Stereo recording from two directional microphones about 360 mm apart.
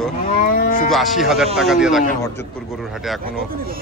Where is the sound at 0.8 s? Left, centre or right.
Centre.